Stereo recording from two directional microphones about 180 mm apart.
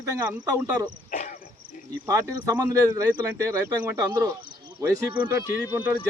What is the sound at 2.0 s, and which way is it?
Speech, 20° right (ahead or behind).